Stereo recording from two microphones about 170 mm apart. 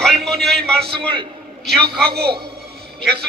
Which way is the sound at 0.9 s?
30° right (ahead or behind).